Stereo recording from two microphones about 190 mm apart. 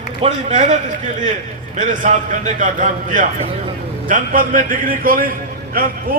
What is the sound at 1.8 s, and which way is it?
A man's voice, 40° right (ahead or behind).